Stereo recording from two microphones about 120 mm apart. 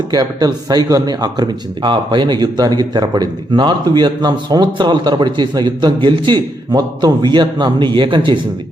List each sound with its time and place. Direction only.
0.1 s speech: 35° right (ahead or behind)